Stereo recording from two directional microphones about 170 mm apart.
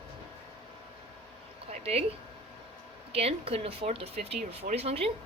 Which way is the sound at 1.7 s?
40° right (ahead or behind).